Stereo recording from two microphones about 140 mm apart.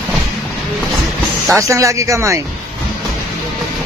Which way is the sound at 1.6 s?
25° right (ahead or behind).